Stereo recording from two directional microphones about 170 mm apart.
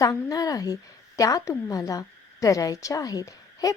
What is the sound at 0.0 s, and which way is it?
A woman's voice, 20° left (ahead or behind).